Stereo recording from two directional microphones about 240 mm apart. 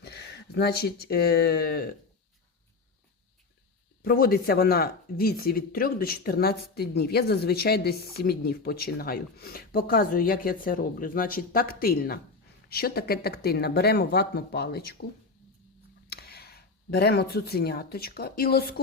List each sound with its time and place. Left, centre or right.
0.0 s speech: left
4.0 s speech: left
16.0 s speech: left